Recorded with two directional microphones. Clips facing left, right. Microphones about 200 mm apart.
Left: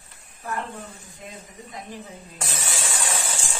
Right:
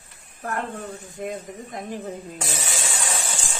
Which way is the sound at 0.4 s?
55° right (ahead or behind).